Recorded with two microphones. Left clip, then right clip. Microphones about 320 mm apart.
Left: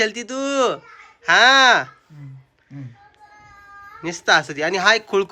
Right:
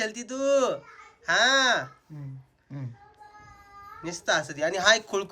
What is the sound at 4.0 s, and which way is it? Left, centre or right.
A man's voice, centre.